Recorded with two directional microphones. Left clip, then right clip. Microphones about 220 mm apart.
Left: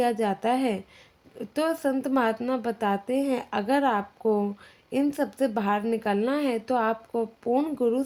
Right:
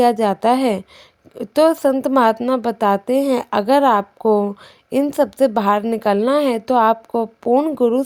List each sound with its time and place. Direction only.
0.0 s a woman's voice: 40° right (ahead or behind)